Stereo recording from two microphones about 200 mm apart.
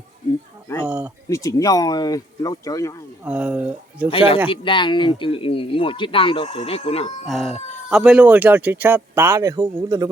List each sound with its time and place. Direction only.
0.9 s speech: 10° right (ahead or behind)
1.3 s speech: 15° left (ahead or behind)
3.2 s speech: 5° right (ahead or behind)
4.6 s speech: 25° left (ahead or behind)
7.3 s speech: centre (ahead or behind); by 10.1 s 20° right (ahead or behind)